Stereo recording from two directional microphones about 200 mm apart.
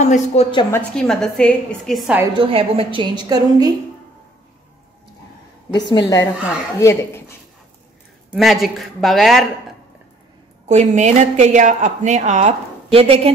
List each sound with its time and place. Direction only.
0.0 s a woman's voice: 35° left (ahead or behind)
0.5 s a woman's voice: 20° left (ahead or behind)
0.7 s a woman's voice: 5° left (ahead or behind)
2.3 s a woman's voice: 30° right (ahead or behind)
5.9 s a woman's voice: 20° left (ahead or behind)
8.3 s a woman's voice: centre (ahead or behind)
10.7 s speech: 35° right (ahead or behind)